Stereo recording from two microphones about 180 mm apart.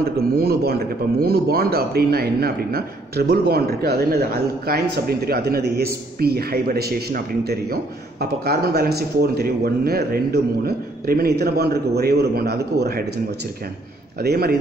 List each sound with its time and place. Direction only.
0.2 s a man's voice: 60° right (ahead or behind)
14.2 s a man's voice: 60° right (ahead or behind)